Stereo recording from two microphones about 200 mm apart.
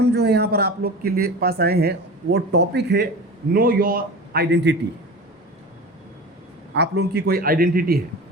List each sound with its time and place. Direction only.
0.0 s speech: 55° right (ahead or behind)
3.5 s speech: 45° right (ahead or behind)
6.7 s speech: 55° right (ahead or behind)